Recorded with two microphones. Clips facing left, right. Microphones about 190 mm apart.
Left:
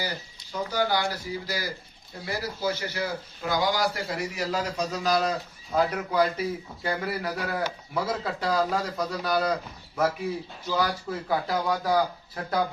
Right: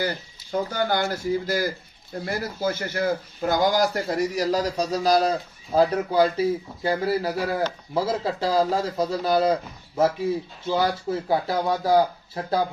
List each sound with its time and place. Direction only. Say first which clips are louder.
0.5 s a man's voice: right 2 dB; 50° right (ahead or behind); by 12.6 s 30° right (ahead or behind)